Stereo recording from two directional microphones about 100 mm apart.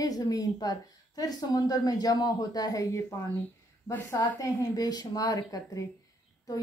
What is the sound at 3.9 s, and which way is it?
Speech, 20° left (ahead or behind).